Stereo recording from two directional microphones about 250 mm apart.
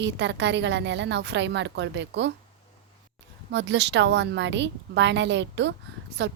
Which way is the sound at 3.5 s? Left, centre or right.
Right.